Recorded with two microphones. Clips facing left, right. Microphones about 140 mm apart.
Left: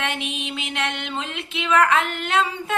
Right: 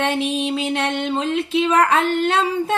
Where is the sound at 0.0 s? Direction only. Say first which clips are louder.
Right 8 dB; 35° right (ahead or behind).